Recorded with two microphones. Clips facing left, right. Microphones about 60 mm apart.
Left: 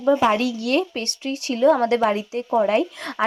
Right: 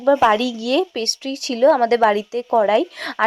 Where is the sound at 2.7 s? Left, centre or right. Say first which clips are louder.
Right 3 dB; right.